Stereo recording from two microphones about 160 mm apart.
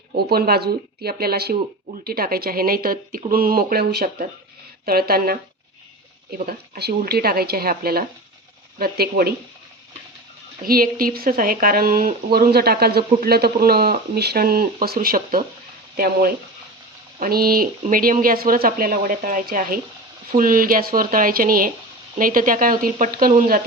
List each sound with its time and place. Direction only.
0.2 s speech: 80° right
10.6 s speech: 65° right (ahead or behind)